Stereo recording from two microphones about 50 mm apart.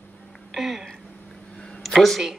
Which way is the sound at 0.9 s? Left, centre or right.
Centre.